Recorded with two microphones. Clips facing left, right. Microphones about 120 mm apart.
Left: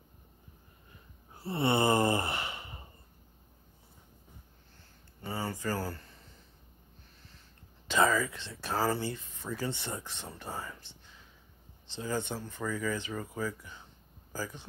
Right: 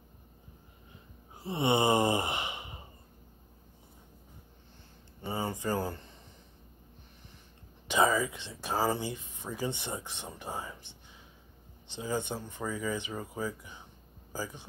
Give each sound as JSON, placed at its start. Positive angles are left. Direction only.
{"t": 1.3, "sound": "sigh", "side_deg": -15}
{"t": 5.3, "sound": "a sound", "side_deg": -20}
{"t": 7.9, "sound": "speech", "side_deg": -15}
{"t": 11.9, "sound": "speech", "side_deg": -15}